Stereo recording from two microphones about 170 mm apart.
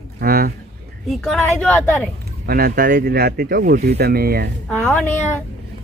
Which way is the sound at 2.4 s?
60° right (ahead or behind).